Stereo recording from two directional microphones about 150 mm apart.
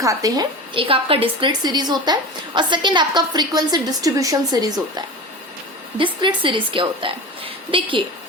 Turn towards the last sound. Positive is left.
turn(degrees=-35)  # may be behind; listen again after turning